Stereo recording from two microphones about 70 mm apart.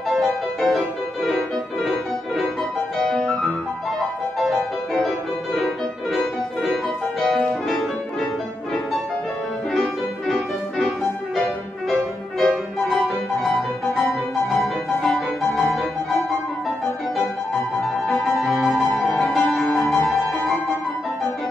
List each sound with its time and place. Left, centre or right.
0.2 s music: centre
3.0 s music: centre
7.2 s music: centre
9.7 s music: centre
17.7 s music: centre